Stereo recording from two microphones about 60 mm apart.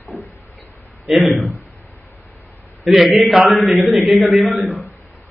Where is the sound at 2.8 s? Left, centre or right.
Centre.